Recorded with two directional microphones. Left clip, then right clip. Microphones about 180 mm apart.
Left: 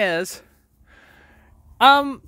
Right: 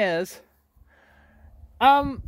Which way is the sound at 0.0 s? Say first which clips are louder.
Left 2 dB; 25° left (ahead or behind).